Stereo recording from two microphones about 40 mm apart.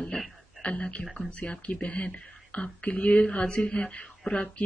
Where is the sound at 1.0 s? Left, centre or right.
Centre.